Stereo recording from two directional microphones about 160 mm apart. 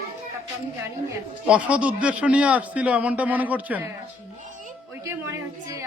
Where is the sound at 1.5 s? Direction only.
10° right (ahead or behind).